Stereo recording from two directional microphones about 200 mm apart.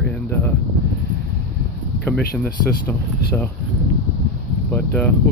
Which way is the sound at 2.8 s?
10° left (ahead or behind).